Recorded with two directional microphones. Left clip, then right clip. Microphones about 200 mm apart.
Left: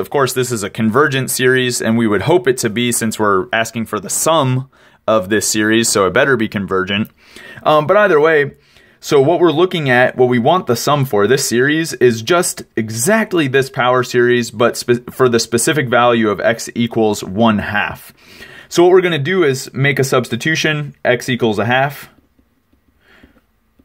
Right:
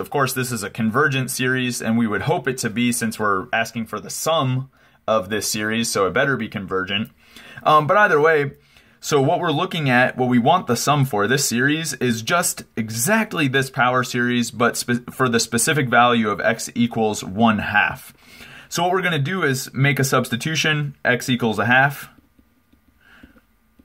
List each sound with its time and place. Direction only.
0.0 s speech: 35° left (ahead or behind)